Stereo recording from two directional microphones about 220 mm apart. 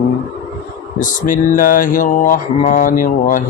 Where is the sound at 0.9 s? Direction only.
35° left (ahead or behind).